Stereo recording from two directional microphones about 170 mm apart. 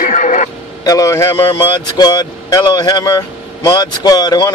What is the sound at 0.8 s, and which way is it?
Speech, 20° left (ahead or behind).